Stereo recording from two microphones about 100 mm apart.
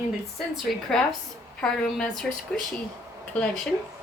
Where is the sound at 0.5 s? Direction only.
5° left (ahead or behind).